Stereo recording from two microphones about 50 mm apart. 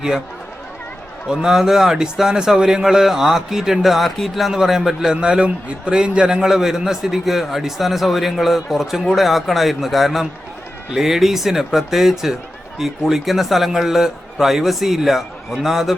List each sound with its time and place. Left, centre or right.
1.3 s a man's voice: centre
5.1 s a man's voice: right
6.5 s a man's voice: centre